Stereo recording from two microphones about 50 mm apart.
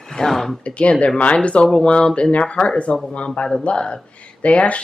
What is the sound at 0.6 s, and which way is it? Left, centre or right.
Speech, left.